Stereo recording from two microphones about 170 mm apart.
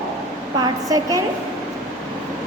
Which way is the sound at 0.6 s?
20° right (ahead or behind).